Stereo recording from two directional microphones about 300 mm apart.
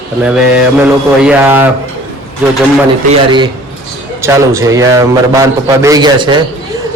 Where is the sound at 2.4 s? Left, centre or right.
Centre.